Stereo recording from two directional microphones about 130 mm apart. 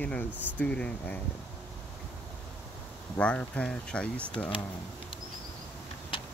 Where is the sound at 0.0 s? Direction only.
10° left (ahead or behind).